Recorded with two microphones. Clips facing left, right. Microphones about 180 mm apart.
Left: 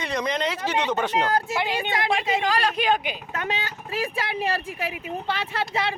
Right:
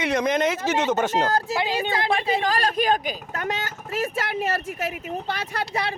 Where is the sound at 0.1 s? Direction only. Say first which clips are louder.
Right 4 dB; 50° right (ahead or behind).